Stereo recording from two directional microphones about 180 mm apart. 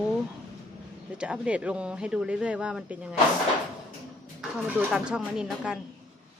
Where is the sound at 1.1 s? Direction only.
5° right (ahead or behind).